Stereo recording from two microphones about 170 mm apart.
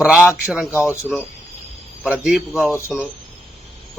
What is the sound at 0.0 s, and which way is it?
Speech, 5° right (ahead or behind).